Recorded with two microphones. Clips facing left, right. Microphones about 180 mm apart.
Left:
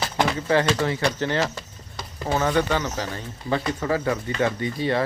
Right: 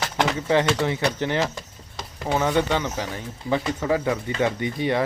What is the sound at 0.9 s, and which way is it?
Speech, 15° right (ahead or behind).